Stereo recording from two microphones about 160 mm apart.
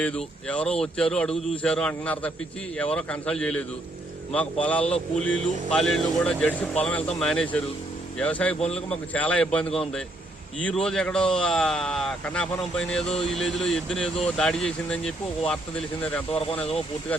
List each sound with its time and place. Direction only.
0.0 s a man's voice: 5° left (ahead or behind)
8.5 s a man's voice: 40° left (ahead or behind)
8.9 s a man's voice: 10° left (ahead or behind)